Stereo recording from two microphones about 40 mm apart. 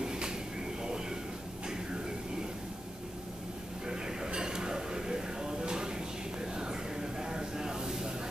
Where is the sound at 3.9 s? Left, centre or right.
Centre.